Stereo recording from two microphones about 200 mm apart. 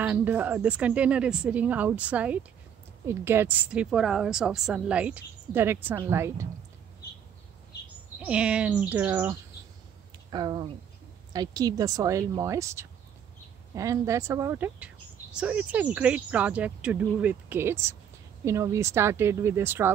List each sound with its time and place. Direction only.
0.0 s a woman's voice: 10° right (ahead or behind)
8.2 s a woman's voice: 5° right (ahead or behind)
10.3 s a woman's voice: 20° right (ahead or behind)